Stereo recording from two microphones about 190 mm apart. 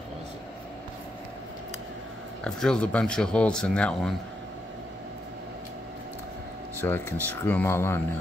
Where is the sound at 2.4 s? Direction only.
5° left (ahead or behind).